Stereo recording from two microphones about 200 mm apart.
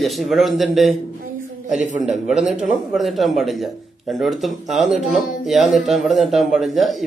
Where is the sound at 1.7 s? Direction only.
35° right (ahead or behind).